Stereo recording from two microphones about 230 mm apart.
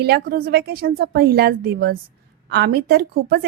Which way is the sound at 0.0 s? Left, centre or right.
Right.